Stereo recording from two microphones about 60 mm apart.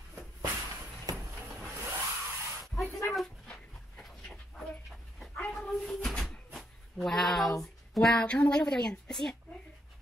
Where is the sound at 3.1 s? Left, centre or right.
Centre.